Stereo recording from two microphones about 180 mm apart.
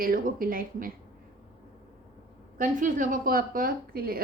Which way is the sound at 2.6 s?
45° right (ahead or behind).